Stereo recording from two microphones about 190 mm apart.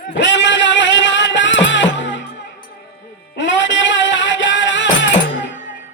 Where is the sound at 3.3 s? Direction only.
75° left (ahead or behind).